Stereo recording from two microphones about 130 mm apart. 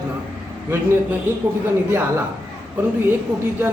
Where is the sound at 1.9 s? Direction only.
20° right (ahead or behind).